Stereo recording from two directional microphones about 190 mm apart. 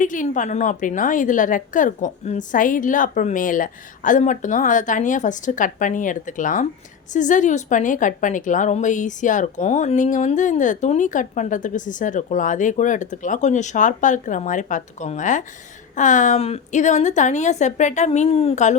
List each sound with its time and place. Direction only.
0.0 s a woman's voice: 45° left (ahead or behind)